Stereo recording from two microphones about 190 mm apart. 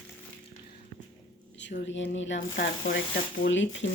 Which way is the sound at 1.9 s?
75° left (ahead or behind).